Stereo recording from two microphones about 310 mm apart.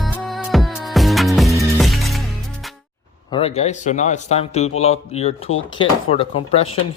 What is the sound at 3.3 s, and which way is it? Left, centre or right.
Speech, centre.